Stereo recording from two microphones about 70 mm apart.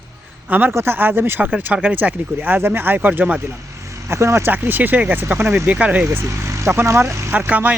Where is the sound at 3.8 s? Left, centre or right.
Right.